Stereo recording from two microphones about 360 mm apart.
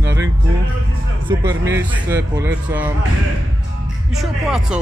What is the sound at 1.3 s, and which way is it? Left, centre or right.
Speech, centre.